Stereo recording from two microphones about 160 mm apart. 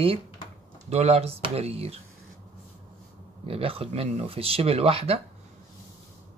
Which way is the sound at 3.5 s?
35° right (ahead or behind).